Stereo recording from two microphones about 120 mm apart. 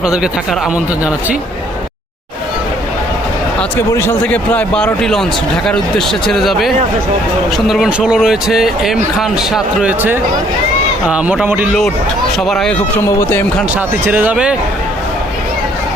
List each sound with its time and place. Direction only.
0.0 s speech: 5° right (ahead or behind)
3.8 s speech: 20° left (ahead or behind)
4.3 s a man's voice: 10° left (ahead or behind)
9.5 s speech: 15° right (ahead or behind)
12.4 s speech: 5° left (ahead or behind)
13.1 s speech: 25° left (ahead or behind)
13.7 s speech: 15° right (ahead or behind)